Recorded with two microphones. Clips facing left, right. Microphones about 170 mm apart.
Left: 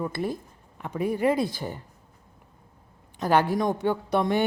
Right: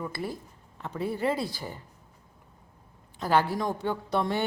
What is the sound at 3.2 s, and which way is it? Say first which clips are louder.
A woman's voice: left 3 dB; 20° left (ahead or behind).